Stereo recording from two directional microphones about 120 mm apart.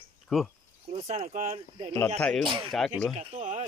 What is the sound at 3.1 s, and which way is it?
Speech, 65° right (ahead or behind).